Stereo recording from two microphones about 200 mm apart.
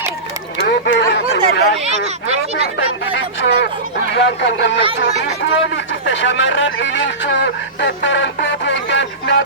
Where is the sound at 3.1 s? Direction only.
65° left (ahead or behind).